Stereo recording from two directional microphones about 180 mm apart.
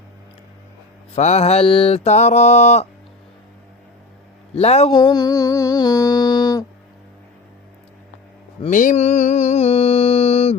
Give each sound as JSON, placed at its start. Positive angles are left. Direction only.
{"t": 1.1, "sound": "mantra", "side_deg": 40}
{"t": 4.5, "sound": "mantra", "side_deg": 35}
{"t": 4.9, "sound": "music", "side_deg": 25}
{"t": 8.7, "sound": "mantra", "side_deg": 45}